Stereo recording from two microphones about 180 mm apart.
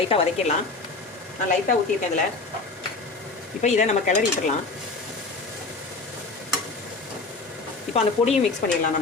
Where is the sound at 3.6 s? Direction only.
40° left (ahead or behind).